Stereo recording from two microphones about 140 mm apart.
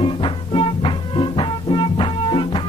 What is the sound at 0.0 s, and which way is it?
Music, 40° left (ahead or behind).